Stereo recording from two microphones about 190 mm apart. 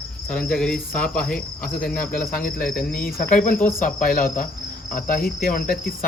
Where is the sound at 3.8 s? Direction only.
50° left (ahead or behind).